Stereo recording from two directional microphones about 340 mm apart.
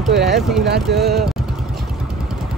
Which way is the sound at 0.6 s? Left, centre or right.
Right.